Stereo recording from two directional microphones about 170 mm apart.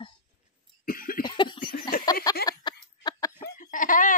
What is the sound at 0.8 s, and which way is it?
Cough, 55° left (ahead or behind).